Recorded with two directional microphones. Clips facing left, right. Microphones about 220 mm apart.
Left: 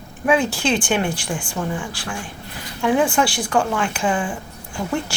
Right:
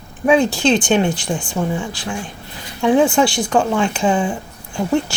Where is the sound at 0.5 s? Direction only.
20° right (ahead or behind).